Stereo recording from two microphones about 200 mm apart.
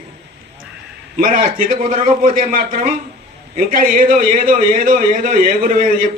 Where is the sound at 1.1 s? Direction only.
45° right (ahead or behind).